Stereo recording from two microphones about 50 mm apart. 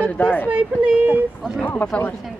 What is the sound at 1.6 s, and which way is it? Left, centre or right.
Speech, left.